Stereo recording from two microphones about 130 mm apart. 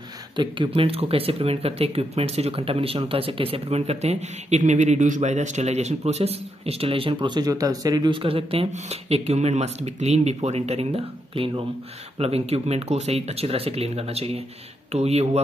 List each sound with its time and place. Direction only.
0.4 s speech: 40° right (ahead or behind)